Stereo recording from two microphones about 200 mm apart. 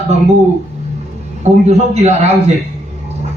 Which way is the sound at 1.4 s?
35° right (ahead or behind).